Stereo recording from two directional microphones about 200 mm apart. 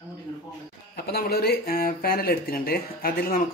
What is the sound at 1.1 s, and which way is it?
Speech, 50° left (ahead or behind).